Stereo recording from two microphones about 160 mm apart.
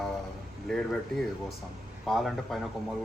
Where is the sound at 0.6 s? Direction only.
5° left (ahead or behind).